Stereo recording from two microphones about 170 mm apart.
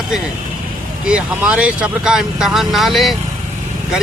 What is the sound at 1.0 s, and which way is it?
Speech, 5° right (ahead or behind).